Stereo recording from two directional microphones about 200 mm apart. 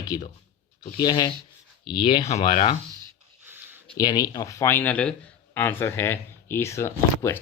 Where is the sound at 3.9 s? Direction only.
20° left (ahead or behind).